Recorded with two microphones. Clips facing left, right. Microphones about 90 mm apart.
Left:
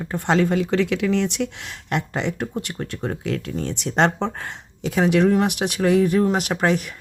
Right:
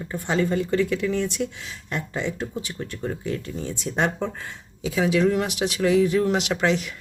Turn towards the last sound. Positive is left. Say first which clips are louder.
# left 2 dB
turn(degrees=45)  # may be behind; listen again after turning